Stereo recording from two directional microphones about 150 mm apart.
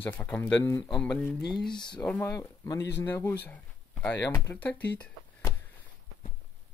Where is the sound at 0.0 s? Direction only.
10° left (ahead or behind).